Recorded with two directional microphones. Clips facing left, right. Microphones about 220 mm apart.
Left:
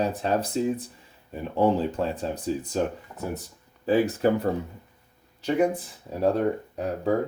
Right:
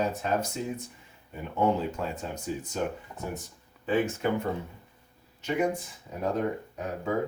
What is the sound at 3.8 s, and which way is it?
Speech, 35° left (ahead or behind).